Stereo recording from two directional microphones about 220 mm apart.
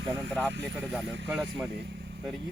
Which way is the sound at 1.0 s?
55° right (ahead or behind).